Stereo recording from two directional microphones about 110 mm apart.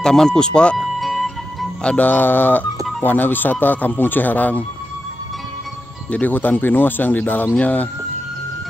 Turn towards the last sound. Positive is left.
turn(degrees=15)  # may be behind; listen again after turning